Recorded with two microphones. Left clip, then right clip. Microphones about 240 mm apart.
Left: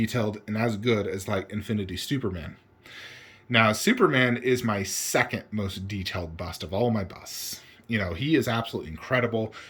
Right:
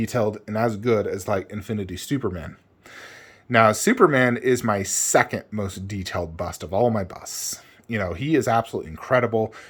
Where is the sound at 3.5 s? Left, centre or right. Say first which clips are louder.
Right 5 dB; right.